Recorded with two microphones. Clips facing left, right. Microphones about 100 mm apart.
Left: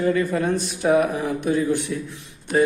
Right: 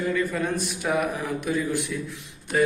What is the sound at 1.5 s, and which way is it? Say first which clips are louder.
A man's voice: left 5 dB; 30° left (ahead or behind).